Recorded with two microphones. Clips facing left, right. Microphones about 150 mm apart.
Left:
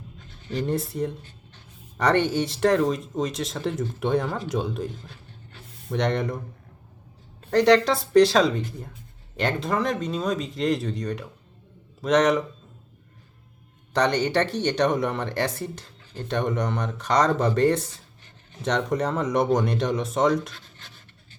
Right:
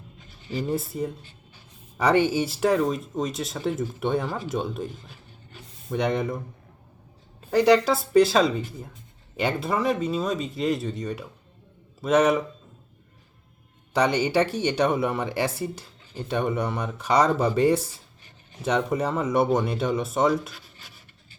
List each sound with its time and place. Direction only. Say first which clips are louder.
0.5 s speech: left 1 dB; 5° right (ahead or behind)
7.5 s speech: even; 5° right (ahead or behind)
13.9 s speech: even; 10° right (ahead or behind)